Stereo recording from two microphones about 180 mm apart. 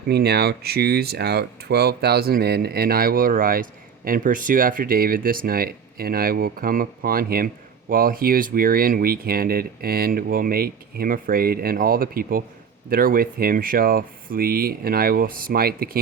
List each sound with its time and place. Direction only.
0.1 s speech: 65° right (ahead or behind)